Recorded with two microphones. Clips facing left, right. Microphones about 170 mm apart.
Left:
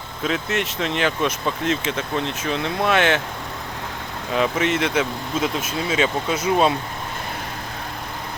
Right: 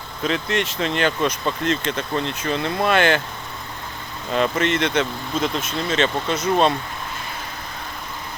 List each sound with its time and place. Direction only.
0.2 s speech: centre (ahead or behind)
4.3 s speech: 5° left (ahead or behind)